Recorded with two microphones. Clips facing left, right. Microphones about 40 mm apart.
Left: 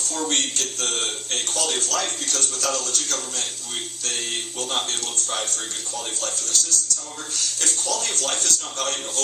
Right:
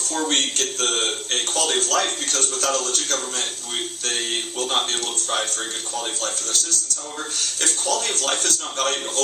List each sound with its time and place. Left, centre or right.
0.0 s a man's voice: right
4.7 s a man's voice: right